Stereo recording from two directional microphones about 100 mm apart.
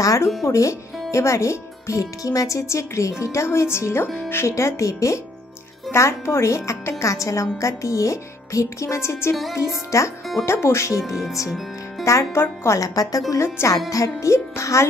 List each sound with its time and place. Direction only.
0.0 s speech: 35° left (ahead or behind)
9.3 s music: centre (ahead or behind)
9.8 s speech: 30° left (ahead or behind)
11.0 s music: 5° right (ahead or behind)
12.0 s speech: 30° left (ahead or behind)